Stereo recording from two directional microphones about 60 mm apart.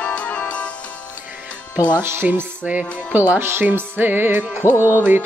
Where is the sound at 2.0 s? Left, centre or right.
Right.